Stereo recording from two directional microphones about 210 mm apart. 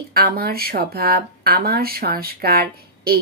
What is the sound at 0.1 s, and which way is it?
Speech, 45° right (ahead or behind).